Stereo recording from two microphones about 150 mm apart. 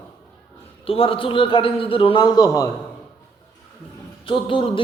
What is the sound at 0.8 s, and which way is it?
A man's voice, 35° left (ahead or behind).